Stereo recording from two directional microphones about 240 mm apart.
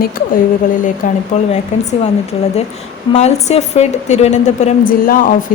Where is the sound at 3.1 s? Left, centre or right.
Left.